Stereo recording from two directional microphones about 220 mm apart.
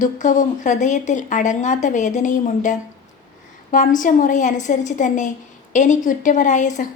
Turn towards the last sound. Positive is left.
turn(degrees=35)  # may be behind; listen again after turning